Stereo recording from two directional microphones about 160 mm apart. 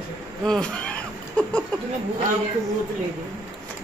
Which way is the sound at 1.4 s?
10° left (ahead or behind).